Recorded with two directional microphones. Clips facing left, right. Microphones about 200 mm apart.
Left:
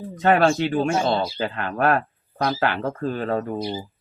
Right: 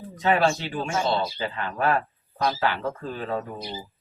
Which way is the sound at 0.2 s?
55° left (ahead or behind).